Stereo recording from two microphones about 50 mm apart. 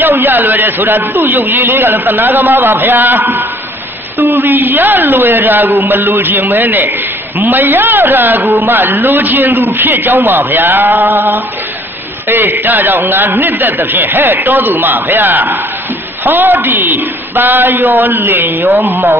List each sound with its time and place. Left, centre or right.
0.1 s a man's voice: right